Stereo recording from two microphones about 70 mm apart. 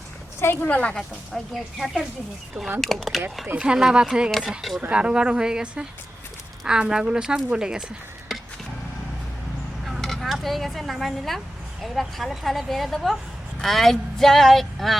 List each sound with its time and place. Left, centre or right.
0.5 s a woman's voice: left
0.9 s a woman's voice: centre
4.3 s a woman's voice: centre
4.8 s a woman's voice: centre
9.8 s a sound: centre
11.8 s a woman's voice: centre